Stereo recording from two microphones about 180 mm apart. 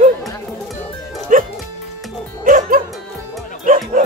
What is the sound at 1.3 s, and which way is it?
Music, 45° right (ahead or behind).